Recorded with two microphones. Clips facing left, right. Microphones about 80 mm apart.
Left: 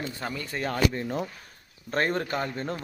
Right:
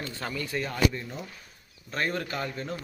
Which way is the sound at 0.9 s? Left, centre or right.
Left.